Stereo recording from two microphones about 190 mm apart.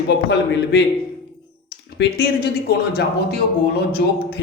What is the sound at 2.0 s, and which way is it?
Speech, 55° left (ahead or behind).